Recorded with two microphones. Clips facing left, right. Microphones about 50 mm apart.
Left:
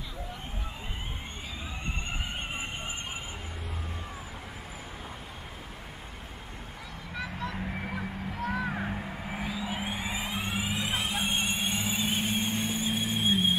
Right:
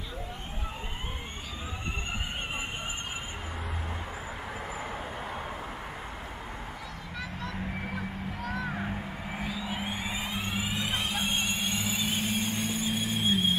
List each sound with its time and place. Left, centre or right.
7.2 s vehicle: centre
11.8 s squeal: centre